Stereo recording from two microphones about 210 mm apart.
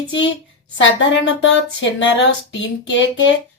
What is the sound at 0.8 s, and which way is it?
Speech, 60° left (ahead or behind).